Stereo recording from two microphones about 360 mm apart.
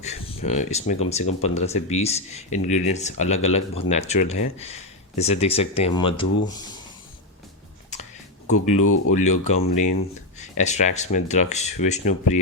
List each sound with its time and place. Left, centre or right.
0.0 s speech: centre
8.8 s speech: left
9.4 s speech: centre